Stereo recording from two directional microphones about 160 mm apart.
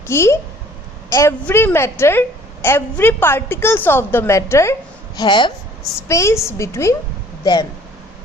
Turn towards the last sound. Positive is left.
turn(degrees=25)  # may be behind; listen again after turning